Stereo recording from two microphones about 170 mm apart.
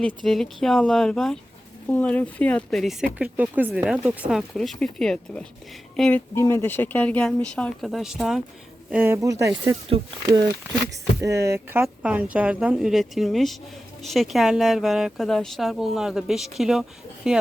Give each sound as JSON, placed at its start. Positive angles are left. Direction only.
{"t": 0.3, "sound": "speech", "side_deg": 0}
{"t": 8.9, "sound": "speech", "side_deg": -10}
{"t": 11.2, "sound": "speech", "side_deg": -15}